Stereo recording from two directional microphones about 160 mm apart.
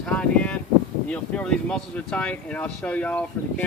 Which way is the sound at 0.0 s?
5° left (ahead or behind).